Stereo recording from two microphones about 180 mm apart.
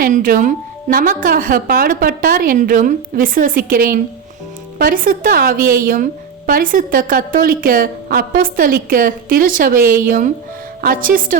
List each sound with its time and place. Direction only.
0.0 s a woman's voice: 50° right (ahead or behind)